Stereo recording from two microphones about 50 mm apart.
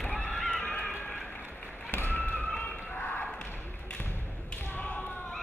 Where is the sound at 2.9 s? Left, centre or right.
Left.